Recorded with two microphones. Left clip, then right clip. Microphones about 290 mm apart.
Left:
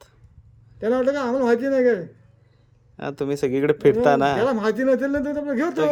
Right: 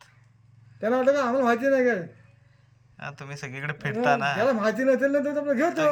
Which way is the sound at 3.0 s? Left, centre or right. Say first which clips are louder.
Left 13 dB; left.